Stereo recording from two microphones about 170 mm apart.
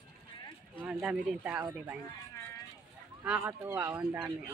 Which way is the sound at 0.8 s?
10° right (ahead or behind).